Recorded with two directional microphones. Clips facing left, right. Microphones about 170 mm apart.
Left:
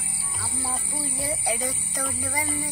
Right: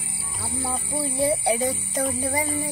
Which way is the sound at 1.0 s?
25° right (ahead or behind).